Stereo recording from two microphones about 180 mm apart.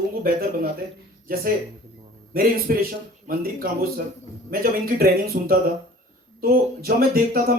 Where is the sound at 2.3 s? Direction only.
50° right (ahead or behind).